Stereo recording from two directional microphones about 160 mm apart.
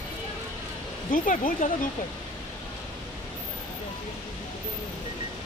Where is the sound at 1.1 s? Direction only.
60° left (ahead or behind).